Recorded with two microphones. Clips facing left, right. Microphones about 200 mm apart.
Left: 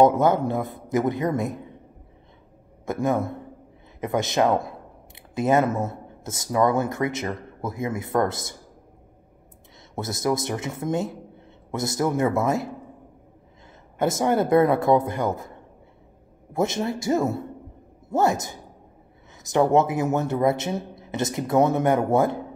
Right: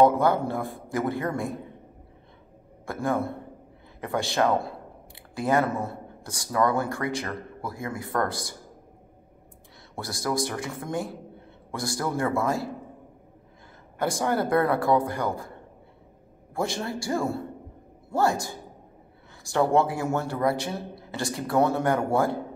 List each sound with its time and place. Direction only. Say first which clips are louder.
0.0 s speech: left 2 dB; 20° left (ahead or behind)
2.8 s speech: left 3 dB; 20° left (ahead or behind)
9.9 s speech: left 4 dB; 20° left (ahead or behind)
13.9 s speech: left 4 dB; 20° left (ahead or behind)
16.5 s speech: left 5 dB; 20° left (ahead or behind)